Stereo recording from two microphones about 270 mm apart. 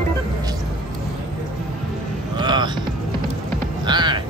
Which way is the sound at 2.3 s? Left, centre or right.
Centre.